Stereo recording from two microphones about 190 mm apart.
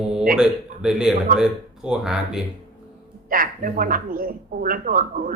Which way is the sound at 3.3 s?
50° right (ahead or behind).